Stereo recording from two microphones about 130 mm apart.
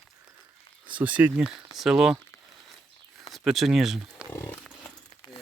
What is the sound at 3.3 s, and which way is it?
Speech, centre (ahead or behind).